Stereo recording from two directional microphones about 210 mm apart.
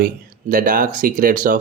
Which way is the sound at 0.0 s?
40° right (ahead or behind).